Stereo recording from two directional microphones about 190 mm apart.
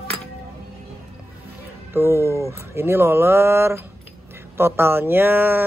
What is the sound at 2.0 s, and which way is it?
Speech, 15° right (ahead or behind).